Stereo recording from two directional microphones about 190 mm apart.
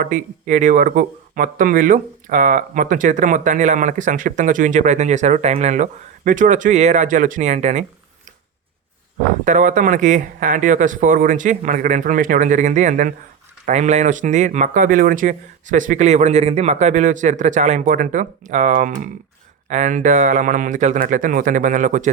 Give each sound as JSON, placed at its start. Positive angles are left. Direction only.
{"t": 0.0, "sound": "speech", "side_deg": -40}
{"t": 9.4, "sound": "speech", "side_deg": -40}